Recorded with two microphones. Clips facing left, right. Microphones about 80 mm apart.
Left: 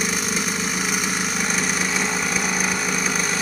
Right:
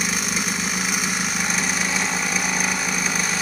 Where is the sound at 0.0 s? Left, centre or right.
Centre.